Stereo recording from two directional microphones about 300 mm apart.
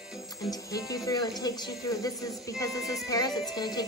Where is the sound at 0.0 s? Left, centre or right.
Centre.